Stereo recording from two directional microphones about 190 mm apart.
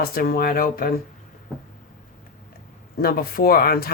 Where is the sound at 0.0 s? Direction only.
50° left (ahead or behind).